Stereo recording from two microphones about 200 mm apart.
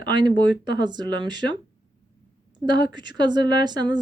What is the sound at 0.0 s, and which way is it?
Speech, 20° right (ahead or behind).